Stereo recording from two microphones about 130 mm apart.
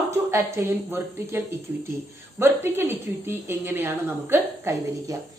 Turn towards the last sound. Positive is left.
turn(degrees=-25)  # may be behind; listen again after turning